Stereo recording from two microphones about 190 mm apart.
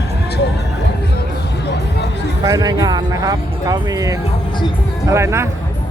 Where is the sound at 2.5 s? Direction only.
20° right (ahead or behind).